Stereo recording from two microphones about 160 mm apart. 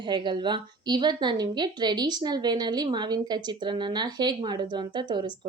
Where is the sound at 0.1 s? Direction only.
30° right (ahead or behind).